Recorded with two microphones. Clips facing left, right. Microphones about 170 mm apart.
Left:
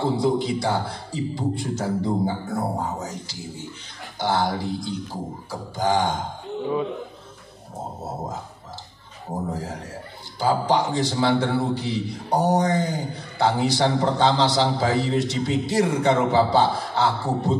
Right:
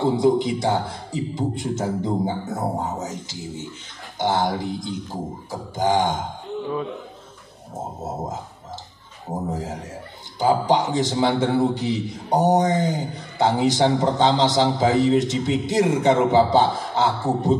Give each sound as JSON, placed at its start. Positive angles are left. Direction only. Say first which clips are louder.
{"t": 0.0, "sound": "a man's voice", "louder": "right 3 dB", "side_deg": -15}
{"t": 8.0, "sound": "a man's voice", "louder": "right 2 dB", "side_deg": -20}
{"t": 9.5, "sound": "a man's voice", "louder": "right 2 dB", "side_deg": -20}